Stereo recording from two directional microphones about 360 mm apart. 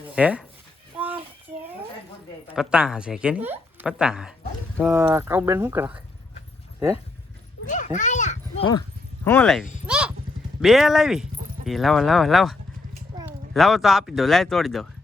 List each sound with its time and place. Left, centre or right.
0.1 s speech: centre
0.9 s child singing: centre
2.6 s a woman's voice: centre
7.6 s a child's voice: left; by 9.6 s centre
9.8 s a sound: centre
10.6 s speech: centre